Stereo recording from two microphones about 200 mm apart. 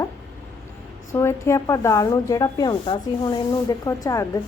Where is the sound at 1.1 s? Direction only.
15° left (ahead or behind).